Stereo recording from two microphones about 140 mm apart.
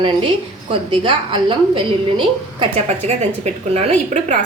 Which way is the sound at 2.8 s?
50° right (ahead or behind).